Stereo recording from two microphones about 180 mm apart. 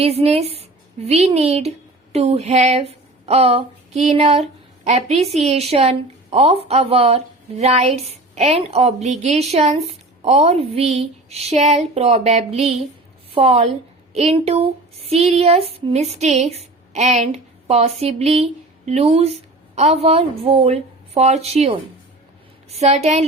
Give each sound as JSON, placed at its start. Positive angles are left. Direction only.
{"t": 0.0, "sound": "a woman's voice", "side_deg": -35}